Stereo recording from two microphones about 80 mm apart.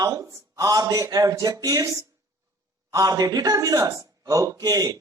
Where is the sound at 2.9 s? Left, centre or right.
Right.